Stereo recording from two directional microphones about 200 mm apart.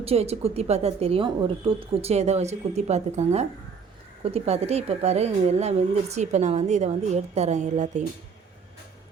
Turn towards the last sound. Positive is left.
turn(degrees=-35)  # may be behind; listen again after turning